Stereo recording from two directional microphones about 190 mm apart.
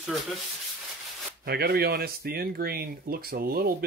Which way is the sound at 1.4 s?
55° right (ahead or behind).